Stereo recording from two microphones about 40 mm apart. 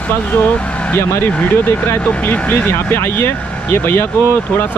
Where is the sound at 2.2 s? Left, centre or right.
Left.